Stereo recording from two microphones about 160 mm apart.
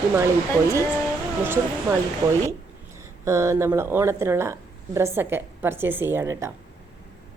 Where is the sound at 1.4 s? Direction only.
15° right (ahead or behind).